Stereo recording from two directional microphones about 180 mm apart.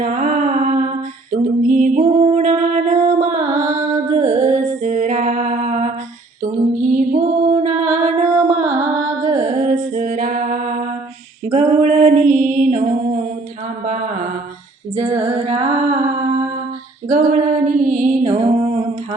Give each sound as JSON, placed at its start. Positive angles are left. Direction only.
{"t": 0.0, "sound": "lullaby", "side_deg": -45}
{"t": 2.0, "sound": "music", "side_deg": -35}
{"t": 11.4, "sound": "female singing", "side_deg": -40}
{"t": 13.8, "sound": "mantra", "side_deg": -45}
{"t": 15.2, "sound": "music", "side_deg": -35}